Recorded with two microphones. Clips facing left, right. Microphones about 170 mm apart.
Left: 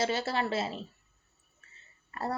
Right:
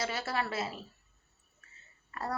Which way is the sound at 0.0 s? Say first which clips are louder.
Left 4 dB; 25° left (ahead or behind).